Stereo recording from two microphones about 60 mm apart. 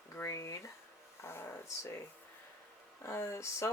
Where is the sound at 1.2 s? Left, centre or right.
Left.